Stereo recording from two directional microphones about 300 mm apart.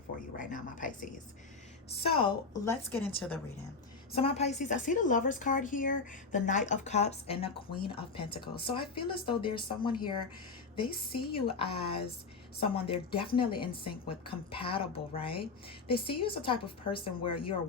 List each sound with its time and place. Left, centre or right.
0.3 s a woman's voice: left; by 3.4 s centre
4.1 s a woman's voice: centre